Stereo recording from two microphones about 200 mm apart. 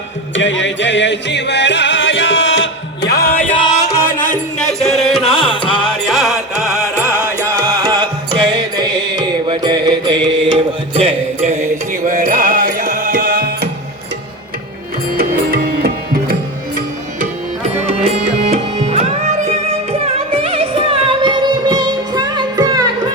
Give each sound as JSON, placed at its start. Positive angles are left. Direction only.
{"t": 0.3, "sound": "music", "side_deg": 65}
{"t": 4.8, "sound": "music", "side_deg": 0}
{"t": 5.2, "sound": "music", "side_deg": 25}
{"t": 5.7, "sound": "music", "side_deg": 5}
{"t": 7.4, "sound": "music", "side_deg": -15}
{"t": 12.0, "sound": "music", "side_deg": -40}
{"t": 15.1, "sound": "music", "side_deg": -45}
{"t": 18.1, "sound": "music", "side_deg": -35}